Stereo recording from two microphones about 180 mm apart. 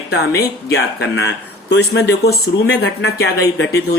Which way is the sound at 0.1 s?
65° left (ahead or behind).